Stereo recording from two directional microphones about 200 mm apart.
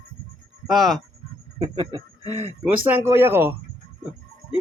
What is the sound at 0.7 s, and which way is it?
Speech, centre (ahead or behind).